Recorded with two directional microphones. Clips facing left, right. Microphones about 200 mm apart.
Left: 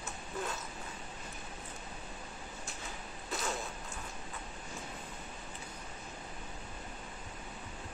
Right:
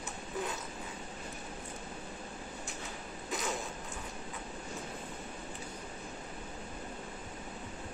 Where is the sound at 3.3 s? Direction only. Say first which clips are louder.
Right 1 dB; 15° right (ahead or behind).